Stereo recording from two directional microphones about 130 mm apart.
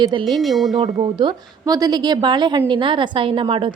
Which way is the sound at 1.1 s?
35° right (ahead or behind).